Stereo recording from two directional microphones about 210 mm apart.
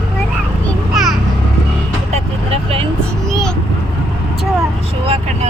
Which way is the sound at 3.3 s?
5° left (ahead or behind).